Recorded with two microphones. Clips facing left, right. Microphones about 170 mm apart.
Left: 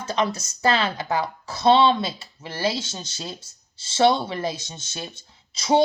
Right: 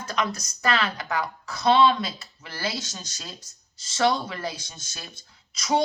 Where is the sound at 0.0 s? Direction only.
30° left (ahead or behind).